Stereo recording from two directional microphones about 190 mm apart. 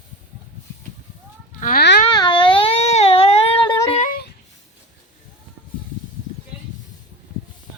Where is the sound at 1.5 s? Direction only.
45° left (ahead or behind).